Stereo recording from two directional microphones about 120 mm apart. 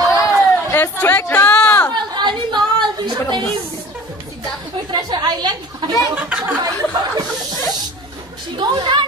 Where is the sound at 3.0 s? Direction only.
40° right (ahead or behind).